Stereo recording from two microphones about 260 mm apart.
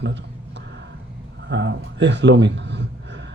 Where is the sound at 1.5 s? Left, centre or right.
Right.